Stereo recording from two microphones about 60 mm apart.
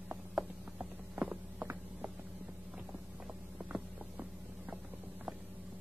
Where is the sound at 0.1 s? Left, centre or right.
Right.